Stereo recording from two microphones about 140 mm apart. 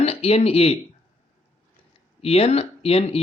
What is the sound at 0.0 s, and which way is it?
Speech, 45° left (ahead or behind).